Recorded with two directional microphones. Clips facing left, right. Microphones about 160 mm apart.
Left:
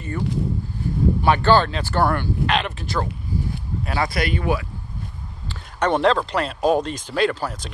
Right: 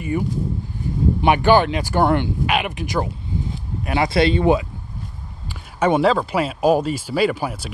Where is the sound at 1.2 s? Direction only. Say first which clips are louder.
Right 3 dB; 15° right (ahead or behind).